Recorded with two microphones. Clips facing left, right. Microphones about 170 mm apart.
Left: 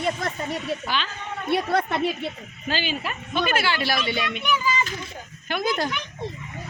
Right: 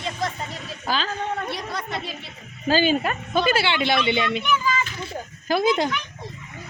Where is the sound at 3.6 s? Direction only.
25° right (ahead or behind).